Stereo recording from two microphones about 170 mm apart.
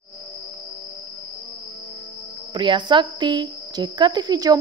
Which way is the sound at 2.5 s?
25° right (ahead or behind).